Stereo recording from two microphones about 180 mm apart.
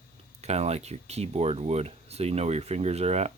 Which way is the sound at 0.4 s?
35° right (ahead or behind).